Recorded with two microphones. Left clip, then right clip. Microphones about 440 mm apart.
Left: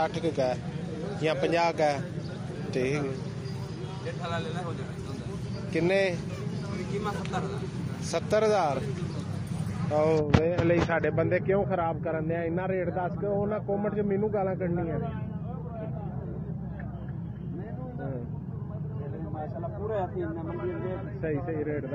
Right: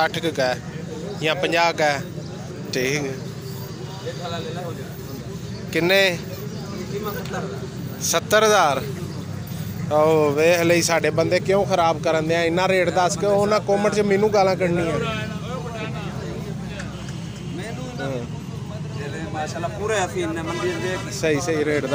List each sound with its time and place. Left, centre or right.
0.0 s speech: left
5.7 s speech: left
8.1 s speech: left
9.9 s speech: left
21.5 s speech: left